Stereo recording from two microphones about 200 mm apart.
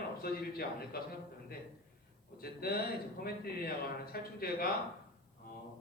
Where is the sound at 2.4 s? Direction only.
50° left (ahead or behind).